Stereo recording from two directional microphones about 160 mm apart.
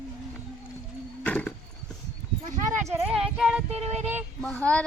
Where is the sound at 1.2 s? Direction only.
10° left (ahead or behind).